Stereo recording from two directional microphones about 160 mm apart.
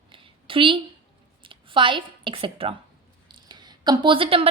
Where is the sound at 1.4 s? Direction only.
30° right (ahead or behind).